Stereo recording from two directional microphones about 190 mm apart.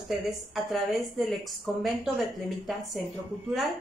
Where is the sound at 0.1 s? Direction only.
Centre (ahead or behind).